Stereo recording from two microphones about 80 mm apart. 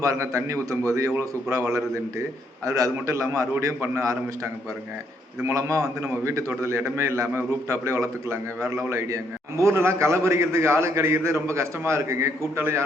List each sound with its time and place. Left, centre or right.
0.0 s a man's voice: right
5.5 s a man's voice: right